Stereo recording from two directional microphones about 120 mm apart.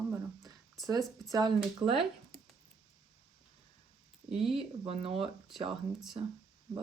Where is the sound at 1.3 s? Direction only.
35° right (ahead or behind).